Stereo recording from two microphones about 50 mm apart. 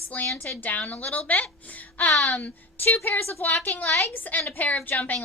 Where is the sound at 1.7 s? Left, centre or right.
Left.